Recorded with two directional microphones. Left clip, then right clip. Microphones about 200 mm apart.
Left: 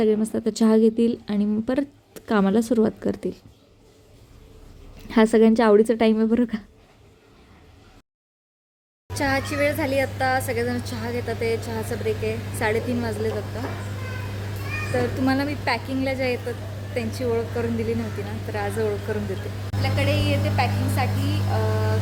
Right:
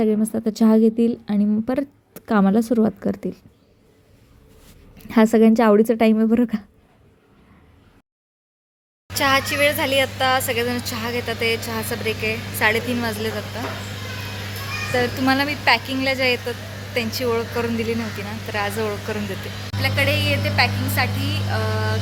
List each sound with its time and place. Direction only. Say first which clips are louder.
0.0 s a woman's voice: even; 30° right (ahead or behind)
5.0 s speech: right 1 dB; 30° right (ahead or behind)
9.1 s speech: right 5 dB; 5° left (ahead or behind)
14.9 s speech: right 4 dB; centre (ahead or behind)